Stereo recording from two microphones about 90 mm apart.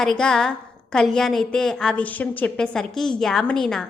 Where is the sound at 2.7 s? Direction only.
5° left (ahead or behind).